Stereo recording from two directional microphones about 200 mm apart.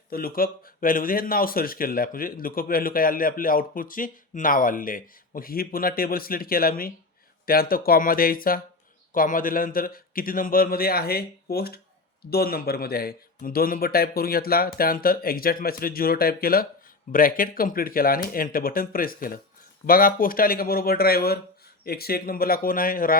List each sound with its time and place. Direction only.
0.1 s speech: 45° left (ahead or behind)